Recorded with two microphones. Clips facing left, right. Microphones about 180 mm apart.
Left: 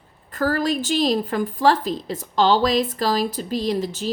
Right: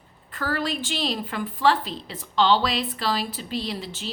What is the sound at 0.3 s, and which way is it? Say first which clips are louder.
A woman's voice: left 6 dB; 40° left (ahead or behind).